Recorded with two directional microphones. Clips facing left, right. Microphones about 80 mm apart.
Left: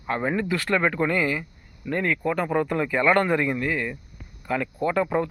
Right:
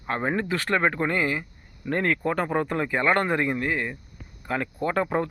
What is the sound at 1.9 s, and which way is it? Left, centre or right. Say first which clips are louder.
A man's voice: even; right.